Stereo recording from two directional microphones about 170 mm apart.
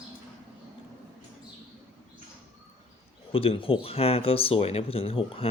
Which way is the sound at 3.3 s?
35° left (ahead or behind).